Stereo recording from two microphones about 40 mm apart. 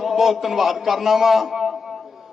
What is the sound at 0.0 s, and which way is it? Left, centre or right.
A man's voice, centre.